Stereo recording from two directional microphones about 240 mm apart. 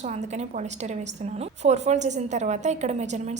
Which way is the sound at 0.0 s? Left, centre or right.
Right.